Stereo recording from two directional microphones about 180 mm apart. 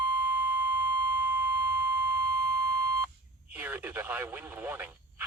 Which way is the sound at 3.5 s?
10° right (ahead or behind).